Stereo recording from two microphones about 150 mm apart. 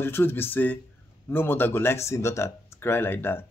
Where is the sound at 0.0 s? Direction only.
15° left (ahead or behind).